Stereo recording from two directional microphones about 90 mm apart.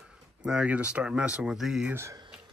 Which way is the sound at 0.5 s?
15° right (ahead or behind).